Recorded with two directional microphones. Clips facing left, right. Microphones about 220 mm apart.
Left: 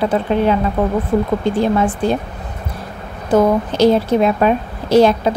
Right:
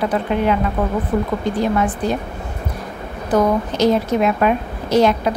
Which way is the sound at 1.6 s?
30° left (ahead or behind).